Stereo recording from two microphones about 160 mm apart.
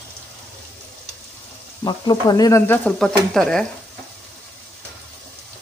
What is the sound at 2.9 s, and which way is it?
Speech, 5° left (ahead or behind).